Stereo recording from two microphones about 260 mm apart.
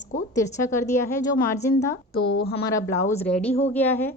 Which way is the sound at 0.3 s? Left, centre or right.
Centre.